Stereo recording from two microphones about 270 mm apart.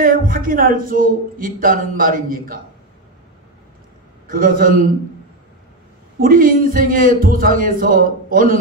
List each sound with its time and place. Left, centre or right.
0.0 s a man's voice: right
4.3 s a man's voice: right
6.2 s a man's voice: right